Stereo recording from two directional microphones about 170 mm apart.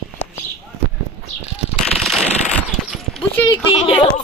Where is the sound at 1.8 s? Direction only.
Centre (ahead or behind).